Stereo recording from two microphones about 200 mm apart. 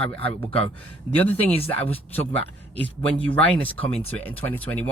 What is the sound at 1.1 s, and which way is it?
Speech, 10° left (ahead or behind).